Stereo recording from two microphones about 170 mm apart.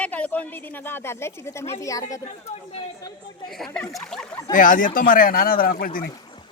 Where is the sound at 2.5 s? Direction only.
40° left (ahead or behind).